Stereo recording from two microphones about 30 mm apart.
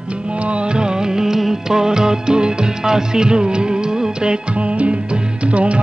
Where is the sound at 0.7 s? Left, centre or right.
Right.